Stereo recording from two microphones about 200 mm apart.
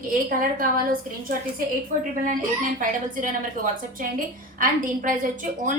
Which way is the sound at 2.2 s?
40° right (ahead or behind).